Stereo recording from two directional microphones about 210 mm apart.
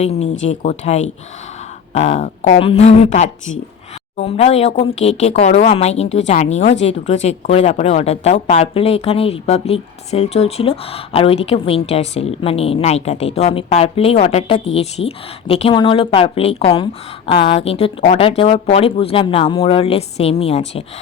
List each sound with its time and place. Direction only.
0.0 s speech: 30° left (ahead or behind)